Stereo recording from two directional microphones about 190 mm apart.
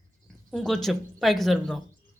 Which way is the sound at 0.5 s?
Centre (ahead or behind).